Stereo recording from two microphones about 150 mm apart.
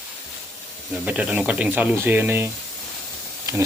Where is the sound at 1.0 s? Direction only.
10° right (ahead or behind).